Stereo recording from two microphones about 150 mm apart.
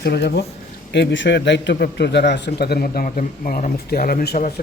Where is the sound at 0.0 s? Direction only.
90° left.